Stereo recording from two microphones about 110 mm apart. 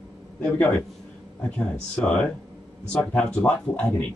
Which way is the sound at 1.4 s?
10° left (ahead or behind).